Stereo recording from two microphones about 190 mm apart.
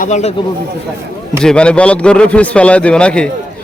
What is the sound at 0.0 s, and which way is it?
Speech, 35° left (ahead or behind).